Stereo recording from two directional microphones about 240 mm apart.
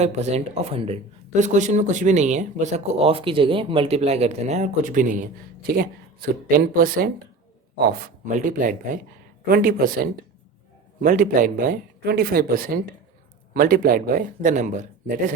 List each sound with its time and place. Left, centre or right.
0.0 s speech: right